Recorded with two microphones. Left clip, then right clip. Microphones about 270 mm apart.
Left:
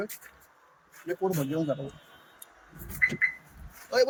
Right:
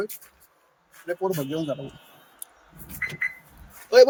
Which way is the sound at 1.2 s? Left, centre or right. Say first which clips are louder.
Right 2 dB; centre.